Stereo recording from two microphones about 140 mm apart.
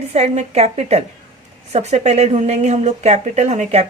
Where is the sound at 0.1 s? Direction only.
50° right (ahead or behind).